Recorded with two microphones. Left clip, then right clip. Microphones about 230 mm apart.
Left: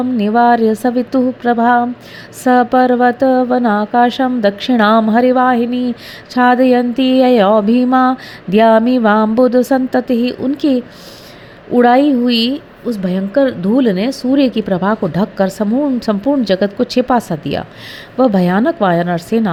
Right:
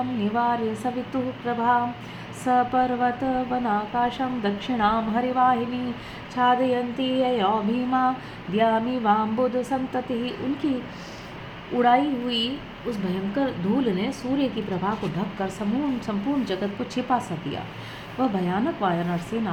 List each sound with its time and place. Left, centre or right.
0.2 s a woman's voice: left
11.8 s a woman's voice: left